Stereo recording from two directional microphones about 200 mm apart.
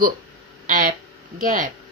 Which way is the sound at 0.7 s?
40° right (ahead or behind).